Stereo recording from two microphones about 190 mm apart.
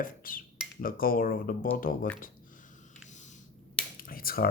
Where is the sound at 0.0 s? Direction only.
50° left (ahead or behind).